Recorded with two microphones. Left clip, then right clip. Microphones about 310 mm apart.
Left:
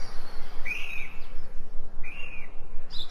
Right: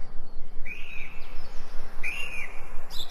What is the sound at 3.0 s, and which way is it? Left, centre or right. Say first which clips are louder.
Bird: right 1 dB; right.